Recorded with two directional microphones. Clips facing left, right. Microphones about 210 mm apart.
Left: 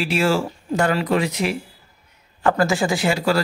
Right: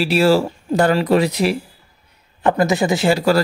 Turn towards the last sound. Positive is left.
turn(degrees=-40)  # may be behind; listen again after turning